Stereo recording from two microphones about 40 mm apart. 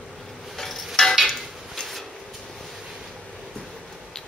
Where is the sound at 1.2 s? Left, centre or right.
Centre.